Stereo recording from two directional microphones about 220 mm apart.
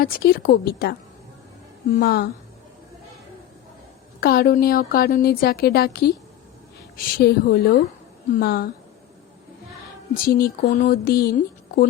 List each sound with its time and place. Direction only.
0.0 s a woman's voice: 45° left (ahead or behind)
2.0 s a woman's voice: 45° left (ahead or behind)
4.2 s a woman's voice: 45° left (ahead or behind)
10.2 s speech: 40° left (ahead or behind)